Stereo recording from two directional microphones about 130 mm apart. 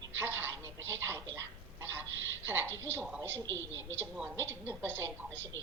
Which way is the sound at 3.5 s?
20° left (ahead or behind).